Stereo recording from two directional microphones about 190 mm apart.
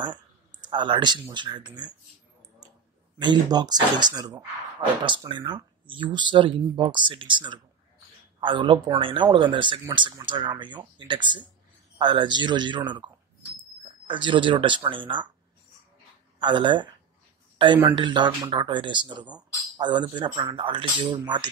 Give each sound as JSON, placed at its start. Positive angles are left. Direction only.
{"t": 0.1, "sound": "a sound", "side_deg": -25}
{"t": 1.3, "sound": "speech", "side_deg": -25}
{"t": 3.2, "sound": "speech", "side_deg": -20}
{"t": 16.3, "sound": "speech", "side_deg": -25}